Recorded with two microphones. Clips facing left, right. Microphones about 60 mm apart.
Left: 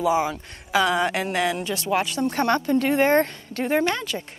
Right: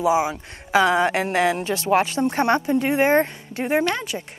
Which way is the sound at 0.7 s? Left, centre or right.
Right.